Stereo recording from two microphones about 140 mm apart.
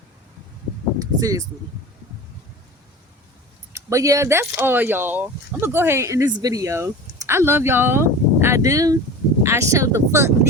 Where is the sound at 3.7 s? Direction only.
25° right (ahead or behind).